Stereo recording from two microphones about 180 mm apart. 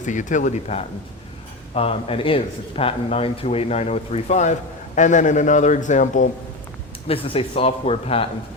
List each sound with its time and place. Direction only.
0.0 s a man's voice: 45° left (ahead or behind)
7.1 s a man's voice: 30° left (ahead or behind)